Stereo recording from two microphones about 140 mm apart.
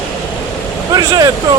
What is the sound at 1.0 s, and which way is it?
Vehicle, 30° right (ahead or behind).